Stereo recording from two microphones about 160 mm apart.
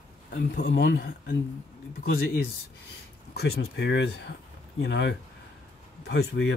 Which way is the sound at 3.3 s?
90° left.